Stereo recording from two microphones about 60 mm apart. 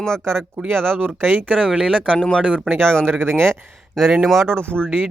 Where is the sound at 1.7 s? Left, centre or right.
Centre.